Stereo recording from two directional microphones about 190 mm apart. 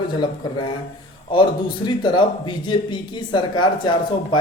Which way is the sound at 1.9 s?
25° left (ahead or behind).